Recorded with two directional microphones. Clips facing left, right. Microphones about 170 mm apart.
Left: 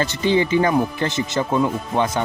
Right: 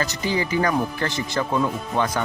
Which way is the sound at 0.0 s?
25° left (ahead or behind).